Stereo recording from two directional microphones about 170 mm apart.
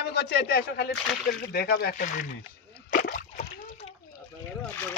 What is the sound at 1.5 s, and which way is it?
Speech, 65° left (ahead or behind).